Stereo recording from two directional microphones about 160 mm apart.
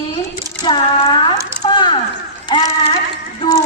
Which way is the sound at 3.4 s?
25° left (ahead or behind).